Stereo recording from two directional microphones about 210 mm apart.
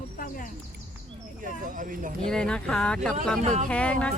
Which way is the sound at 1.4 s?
40° right (ahead or behind).